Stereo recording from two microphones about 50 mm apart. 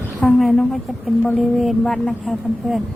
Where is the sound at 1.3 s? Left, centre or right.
Centre.